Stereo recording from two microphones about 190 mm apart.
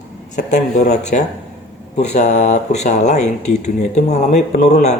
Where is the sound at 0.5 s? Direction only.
40° left (ahead or behind).